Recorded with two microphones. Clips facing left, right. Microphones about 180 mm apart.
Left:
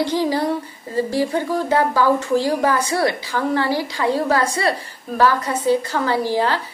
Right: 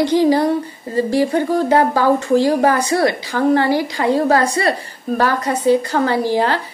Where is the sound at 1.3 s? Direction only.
50° right (ahead or behind).